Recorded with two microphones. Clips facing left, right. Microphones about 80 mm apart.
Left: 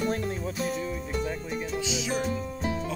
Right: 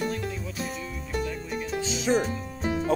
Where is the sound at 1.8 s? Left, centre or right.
Right.